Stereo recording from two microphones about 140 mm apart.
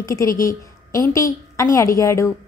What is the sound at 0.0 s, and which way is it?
A woman's voice, 20° left (ahead or behind).